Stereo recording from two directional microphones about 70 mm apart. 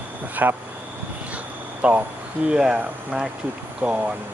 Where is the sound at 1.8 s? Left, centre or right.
Centre.